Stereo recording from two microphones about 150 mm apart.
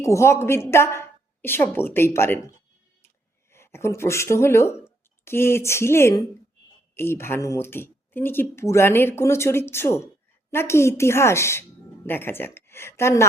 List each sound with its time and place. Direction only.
0.0 s speech: 20° left (ahead or behind)
3.5 s a woman's voice: 15° left (ahead or behind)